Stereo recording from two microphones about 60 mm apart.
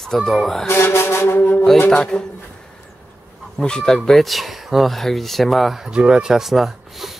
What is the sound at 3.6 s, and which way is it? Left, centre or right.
Speech, centre.